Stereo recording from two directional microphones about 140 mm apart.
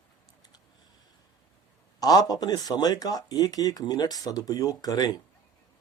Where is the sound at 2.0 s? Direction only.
30° left (ahead or behind).